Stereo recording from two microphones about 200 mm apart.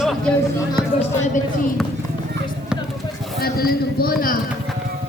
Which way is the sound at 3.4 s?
50° left (ahead or behind).